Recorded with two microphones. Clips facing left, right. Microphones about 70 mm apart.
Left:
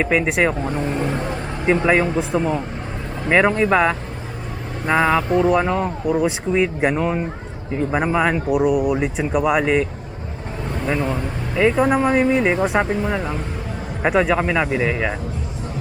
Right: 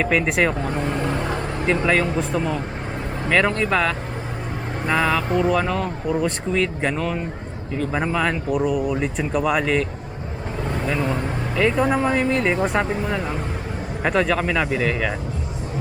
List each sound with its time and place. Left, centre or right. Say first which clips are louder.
0.0 s speech: left 1 dB; centre
1.6 s speech: left 3 dB; centre
10.8 s speech: left 2 dB; centre